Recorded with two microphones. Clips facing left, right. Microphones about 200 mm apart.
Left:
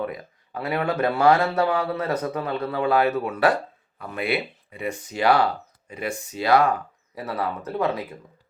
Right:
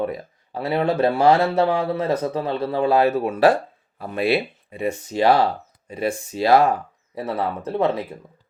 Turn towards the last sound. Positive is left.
turn(degrees=-25)  # may be behind; listen again after turning